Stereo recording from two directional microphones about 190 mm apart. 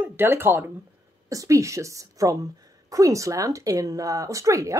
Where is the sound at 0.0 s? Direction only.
10° right (ahead or behind).